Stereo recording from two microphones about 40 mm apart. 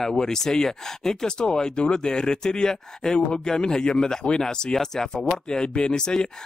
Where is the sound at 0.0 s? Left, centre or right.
Centre.